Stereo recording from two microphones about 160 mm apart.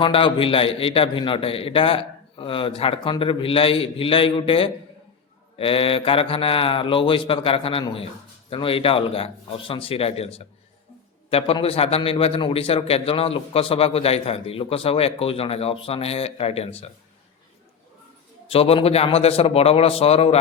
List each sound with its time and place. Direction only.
0.0 s a man's voice: 30° left (ahead or behind)
18.4 s a man's voice: 35° left (ahead or behind)